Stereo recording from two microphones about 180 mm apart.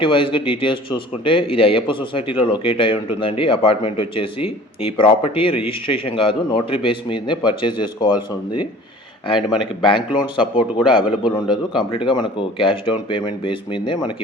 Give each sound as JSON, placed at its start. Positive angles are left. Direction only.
{"t": 0.0, "sound": "a man's voice", "side_deg": 30}
{"t": 9.6, "sound": "a man's voice", "side_deg": 30}